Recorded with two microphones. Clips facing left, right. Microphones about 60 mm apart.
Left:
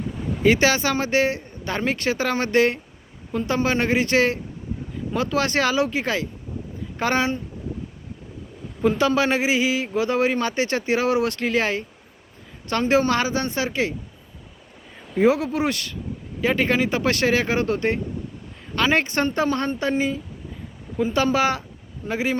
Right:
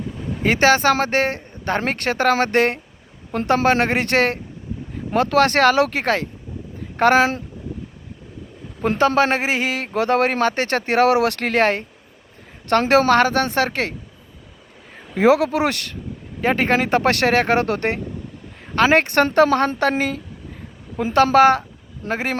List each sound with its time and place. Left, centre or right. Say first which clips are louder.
0.4 s a man's voice: right 3 dB; right
3.3 s speech: right 5 dB; right
7.2 s speech: right 6 dB; right
9.0 s speech: right 6 dB; right
12.8 s speech: right 2 dB; right
13.1 s speech: right 6 dB; right
15.1 s speech: right 4 dB; right
16.4 s speech: right 2 dB; right
16.7 s speech: right 4 dB; right
19.2 s a woman's voice: right 7 dB; right
21.0 s speech: right 5 dB; right
21.3 s speech: right 8 dB; right